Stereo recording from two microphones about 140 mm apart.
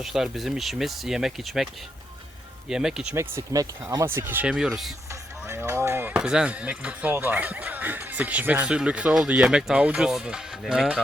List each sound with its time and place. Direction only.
0.0 s speech: centre (ahead or behind)
3.2 s speech: 20° right (ahead or behind); by 4.9 s 5° right (ahead or behind)
5.5 s speech: 20° right (ahead or behind)